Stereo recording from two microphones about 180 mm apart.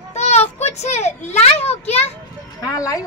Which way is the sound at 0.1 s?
35° left (ahead or behind).